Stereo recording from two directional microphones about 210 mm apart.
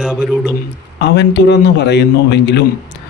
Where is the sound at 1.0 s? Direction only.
50° left (ahead or behind).